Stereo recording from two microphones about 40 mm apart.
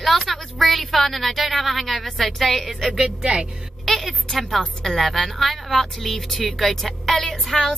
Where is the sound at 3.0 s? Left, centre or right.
Right.